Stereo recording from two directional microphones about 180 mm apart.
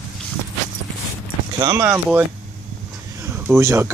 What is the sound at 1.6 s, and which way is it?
Speech, 15° right (ahead or behind).